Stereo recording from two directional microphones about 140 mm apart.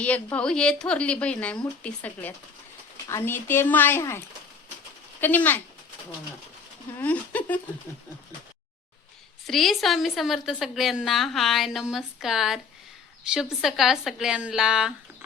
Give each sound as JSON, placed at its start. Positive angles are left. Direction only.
{"t": 0.0, "sound": "a woman's voice", "side_deg": 10}
{"t": 5.2, "sound": "a woman's voice", "side_deg": 15}
{"t": 7.0, "sound": "a woman's voice", "side_deg": 10}
{"t": 9.5, "sound": "a woman's voice", "side_deg": 0}